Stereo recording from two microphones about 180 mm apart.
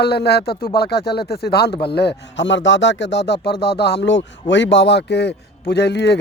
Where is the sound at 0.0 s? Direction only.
65° left (ahead or behind).